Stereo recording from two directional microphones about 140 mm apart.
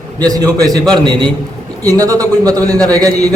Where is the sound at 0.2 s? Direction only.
25° right (ahead or behind).